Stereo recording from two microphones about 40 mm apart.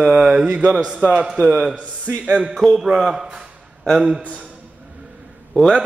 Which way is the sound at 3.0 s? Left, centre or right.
Centre.